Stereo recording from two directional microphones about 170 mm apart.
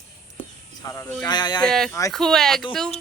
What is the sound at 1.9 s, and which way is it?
Speech, 20° left (ahead or behind).